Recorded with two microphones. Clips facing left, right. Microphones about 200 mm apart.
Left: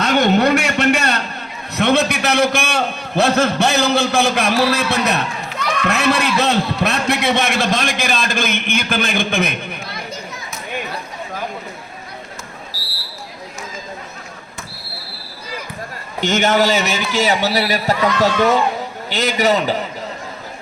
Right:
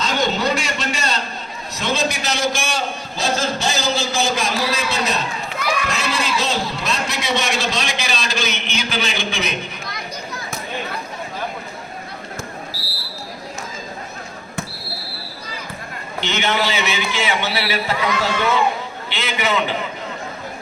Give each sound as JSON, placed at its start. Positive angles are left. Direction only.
{"t": 0.0, "sound": "a man's voice", "side_deg": 60}
{"t": 16.2, "sound": "a man's voice", "side_deg": 45}